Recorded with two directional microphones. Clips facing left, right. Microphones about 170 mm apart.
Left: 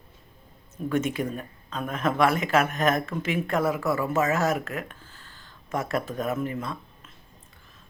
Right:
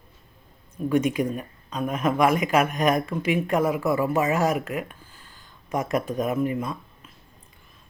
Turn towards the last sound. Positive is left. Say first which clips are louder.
# right 3 dB
turn(degrees=-15)  # may be behind; listen again after turning